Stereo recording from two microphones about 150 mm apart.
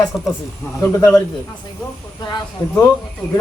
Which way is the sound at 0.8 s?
20° left (ahead or behind).